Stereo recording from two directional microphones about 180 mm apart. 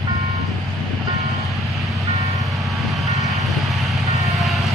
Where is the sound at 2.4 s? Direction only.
Centre (ahead or behind).